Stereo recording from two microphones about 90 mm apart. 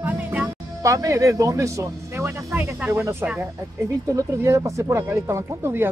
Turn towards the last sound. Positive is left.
turn(degrees=-25)  # may be behind; listen again after turning